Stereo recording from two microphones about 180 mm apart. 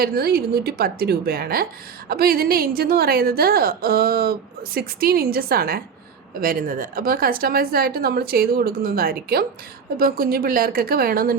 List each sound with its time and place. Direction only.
0.0 s a woman's voice: 55° right (ahead or behind)